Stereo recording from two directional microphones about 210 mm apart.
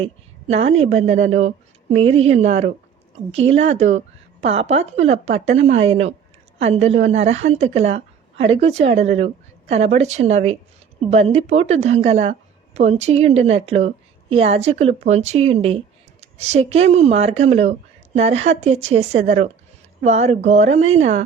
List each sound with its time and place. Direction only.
0.0 s speech: 30° right (ahead or behind)